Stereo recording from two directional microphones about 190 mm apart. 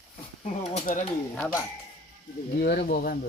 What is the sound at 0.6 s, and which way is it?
Speech, 40° left (ahead or behind).